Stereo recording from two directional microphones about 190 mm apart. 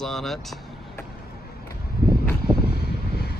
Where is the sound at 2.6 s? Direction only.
55° left (ahead or behind).